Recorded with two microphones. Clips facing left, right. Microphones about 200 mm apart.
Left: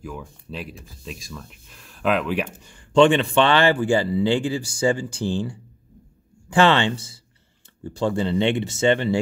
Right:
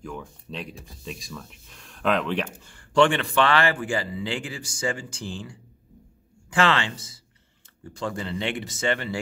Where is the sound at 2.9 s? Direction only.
20° left (ahead or behind).